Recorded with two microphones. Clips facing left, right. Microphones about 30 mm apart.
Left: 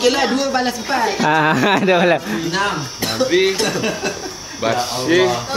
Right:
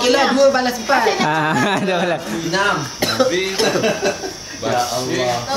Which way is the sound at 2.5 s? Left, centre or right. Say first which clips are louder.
Right 4 dB; centre.